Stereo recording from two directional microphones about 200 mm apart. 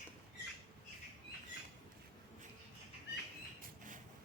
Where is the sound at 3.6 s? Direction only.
40° right (ahead or behind).